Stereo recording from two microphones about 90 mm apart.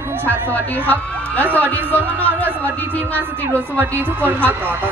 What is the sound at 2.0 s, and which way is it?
Speech, 20° right (ahead or behind).